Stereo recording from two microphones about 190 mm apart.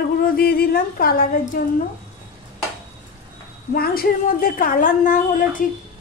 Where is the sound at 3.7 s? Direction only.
55° left (ahead or behind).